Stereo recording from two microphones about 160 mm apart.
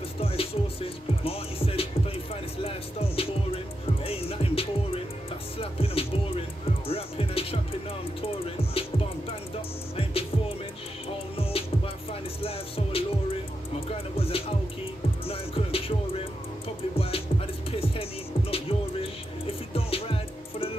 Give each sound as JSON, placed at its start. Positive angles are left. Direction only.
{"t": 0.2, "sound": "music", "side_deg": 35}
{"t": 11.3, "sound": "music", "side_deg": 35}